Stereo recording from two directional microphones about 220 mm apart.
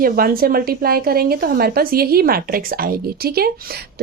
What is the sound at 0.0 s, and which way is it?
Speech, 40° right (ahead or behind).